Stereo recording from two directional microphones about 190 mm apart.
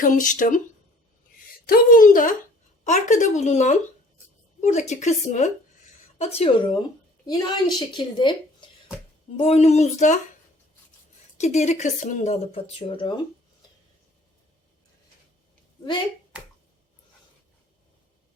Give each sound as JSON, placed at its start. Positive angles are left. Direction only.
{"t": 0.0, "sound": "speech", "side_deg": 45}
{"t": 1.6, "sound": "speech", "side_deg": 50}
{"t": 7.3, "sound": "a woman's voice", "side_deg": 20}
{"t": 9.4, "sound": "speech", "side_deg": 35}
{"t": 11.3, "sound": "speech", "side_deg": 35}